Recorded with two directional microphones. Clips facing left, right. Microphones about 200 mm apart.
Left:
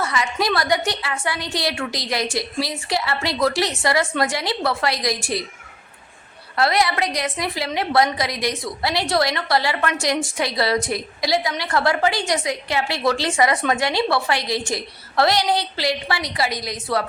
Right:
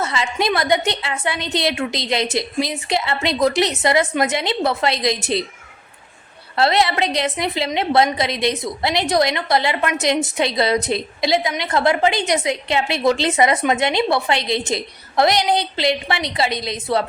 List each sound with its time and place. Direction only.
0.0 s a woman's voice: 25° right (ahead or behind)
6.6 s a woman's voice: 25° right (ahead or behind)